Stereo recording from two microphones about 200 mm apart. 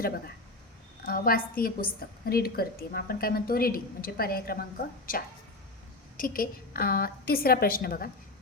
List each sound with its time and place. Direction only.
1.0 s a woman's voice: 45° left (ahead or behind)
6.1 s a woman's voice: 45° left (ahead or behind)